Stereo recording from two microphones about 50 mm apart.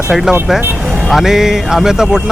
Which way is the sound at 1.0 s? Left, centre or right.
Centre.